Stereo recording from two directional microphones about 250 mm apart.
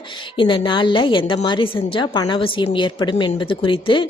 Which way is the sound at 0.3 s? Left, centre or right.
Centre.